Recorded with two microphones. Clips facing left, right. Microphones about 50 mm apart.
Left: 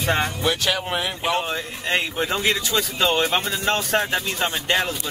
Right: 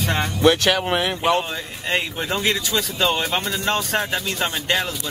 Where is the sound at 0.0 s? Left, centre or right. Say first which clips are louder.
Left 1 dB; centre.